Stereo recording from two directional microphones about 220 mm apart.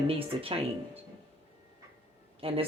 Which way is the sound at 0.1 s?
25° right (ahead or behind).